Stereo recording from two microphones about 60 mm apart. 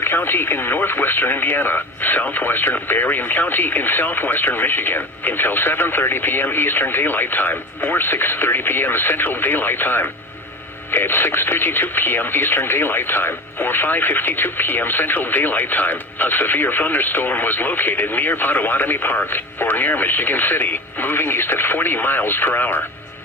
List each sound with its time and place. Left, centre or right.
0.0 s speech: left